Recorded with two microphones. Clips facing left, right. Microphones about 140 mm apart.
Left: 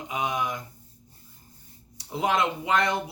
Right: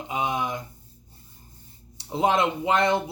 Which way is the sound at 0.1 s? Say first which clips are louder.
Right 2 dB; 25° right (ahead or behind).